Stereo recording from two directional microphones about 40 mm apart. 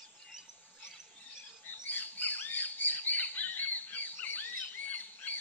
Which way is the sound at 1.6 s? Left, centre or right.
Left.